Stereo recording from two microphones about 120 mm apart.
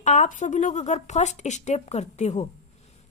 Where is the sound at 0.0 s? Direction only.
85° left.